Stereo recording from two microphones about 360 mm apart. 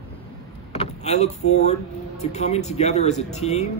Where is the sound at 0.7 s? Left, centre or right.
Centre.